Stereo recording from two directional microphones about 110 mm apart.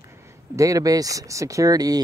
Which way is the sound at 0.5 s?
30° right (ahead or behind).